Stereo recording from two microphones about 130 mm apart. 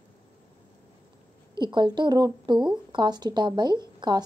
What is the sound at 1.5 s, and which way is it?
A woman's voice, 35° right (ahead or behind).